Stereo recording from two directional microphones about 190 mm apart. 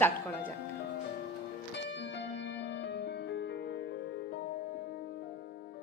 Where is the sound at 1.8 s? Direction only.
65° left (ahead or behind).